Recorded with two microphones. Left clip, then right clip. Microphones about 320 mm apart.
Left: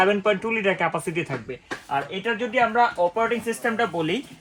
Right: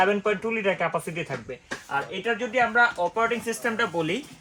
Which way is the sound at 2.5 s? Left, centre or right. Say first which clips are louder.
Left 1 dB; centre.